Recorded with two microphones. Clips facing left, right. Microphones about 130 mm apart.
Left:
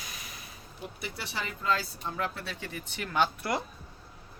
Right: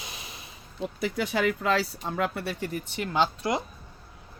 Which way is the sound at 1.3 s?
90° right.